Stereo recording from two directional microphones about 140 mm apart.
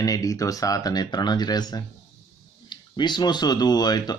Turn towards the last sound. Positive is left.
turn(degrees=30)  # may be behind; listen again after turning